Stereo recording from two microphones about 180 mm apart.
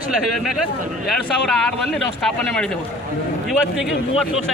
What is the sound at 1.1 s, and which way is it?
Speech, centre (ahead or behind).